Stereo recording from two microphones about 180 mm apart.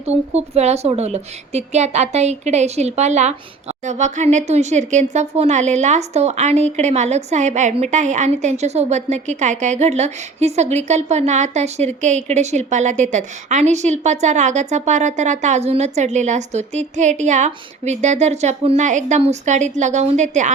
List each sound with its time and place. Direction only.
0.0 s a woman's voice: 35° right (ahead or behind)